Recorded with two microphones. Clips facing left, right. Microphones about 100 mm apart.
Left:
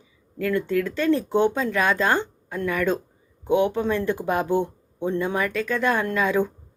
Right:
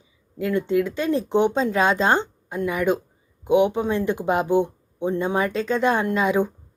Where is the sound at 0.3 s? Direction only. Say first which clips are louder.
Right 2 dB; 20° right (ahead or behind).